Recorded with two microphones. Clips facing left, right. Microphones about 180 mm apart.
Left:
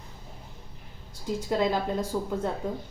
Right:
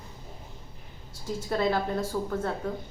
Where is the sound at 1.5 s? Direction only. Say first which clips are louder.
Even; 15° left (ahead or behind).